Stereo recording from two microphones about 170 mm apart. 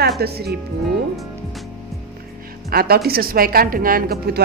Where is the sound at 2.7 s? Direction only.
65° right (ahead or behind).